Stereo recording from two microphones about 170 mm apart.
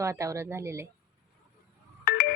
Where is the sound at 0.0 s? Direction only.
20° right (ahead or behind).